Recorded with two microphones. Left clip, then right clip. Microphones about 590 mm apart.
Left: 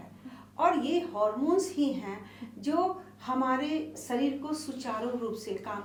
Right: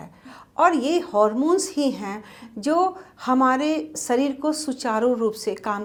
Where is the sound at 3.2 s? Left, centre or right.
Right.